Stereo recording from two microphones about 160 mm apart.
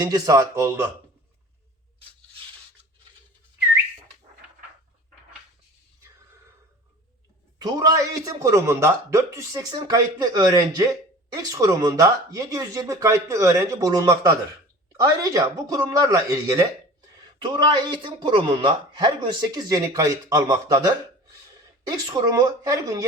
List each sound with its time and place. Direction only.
0.0 s speech: 25° right (ahead or behind)
7.6 s speech: 20° right (ahead or behind)
17.4 s speech: 30° right (ahead or behind)